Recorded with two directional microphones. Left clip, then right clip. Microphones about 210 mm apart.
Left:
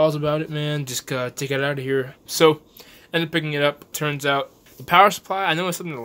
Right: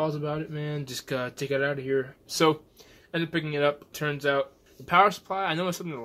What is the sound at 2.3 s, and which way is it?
Speech, 20° left (ahead or behind).